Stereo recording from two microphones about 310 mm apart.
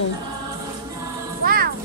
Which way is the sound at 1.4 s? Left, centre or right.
Right.